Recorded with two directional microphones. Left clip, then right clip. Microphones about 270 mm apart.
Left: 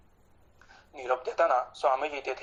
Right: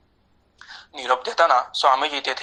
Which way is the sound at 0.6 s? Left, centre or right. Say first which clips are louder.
Right 9 dB; right.